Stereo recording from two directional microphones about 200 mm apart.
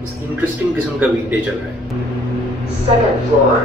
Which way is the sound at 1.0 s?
10° right (ahead or behind).